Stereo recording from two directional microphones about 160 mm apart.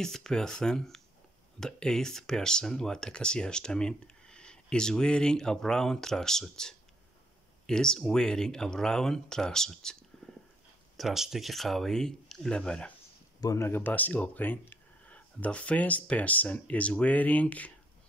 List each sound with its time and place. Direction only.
0.0 s speech: 5° left (ahead or behind)
11.0 s speech: centre (ahead or behind)
13.4 s speech: 20° left (ahead or behind)